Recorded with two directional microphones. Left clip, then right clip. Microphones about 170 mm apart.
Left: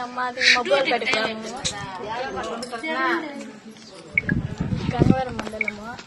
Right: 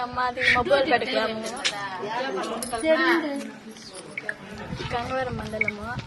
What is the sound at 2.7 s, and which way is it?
Speech, 75° right (ahead or behind).